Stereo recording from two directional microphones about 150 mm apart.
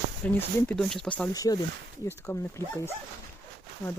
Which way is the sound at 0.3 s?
5° left (ahead or behind).